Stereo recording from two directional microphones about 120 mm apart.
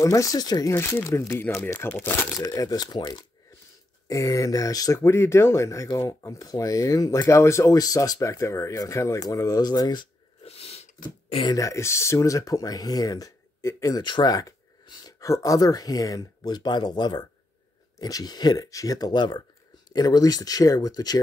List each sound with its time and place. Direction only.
0.0 s speech: 30° left (ahead or behind)
0.7 s speech: 20° left (ahead or behind)
2.3 s speech: 30° left (ahead or behind)
10.4 s a sound: 55° left (ahead or behind)
11.4 s speech: 30° left (ahead or behind)
14.0 s speech: 40° left (ahead or behind)